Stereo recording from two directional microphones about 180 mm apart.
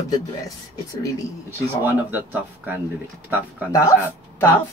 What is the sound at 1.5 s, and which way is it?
Speech, 10° right (ahead or behind).